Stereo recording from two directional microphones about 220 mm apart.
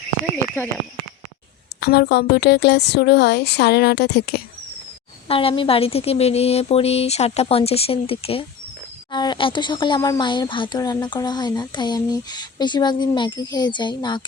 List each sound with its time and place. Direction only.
1.8 s a woman's voice: 45° left (ahead or behind)
5.3 s speech: 25° left (ahead or behind)